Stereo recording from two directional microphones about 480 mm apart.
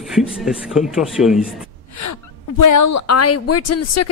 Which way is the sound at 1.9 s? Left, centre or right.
Left.